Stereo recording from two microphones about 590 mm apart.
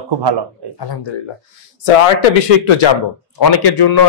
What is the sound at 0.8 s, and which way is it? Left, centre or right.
Speech, left.